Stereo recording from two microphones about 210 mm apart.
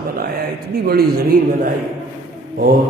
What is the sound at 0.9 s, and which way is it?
Speech, 45° right (ahead or behind).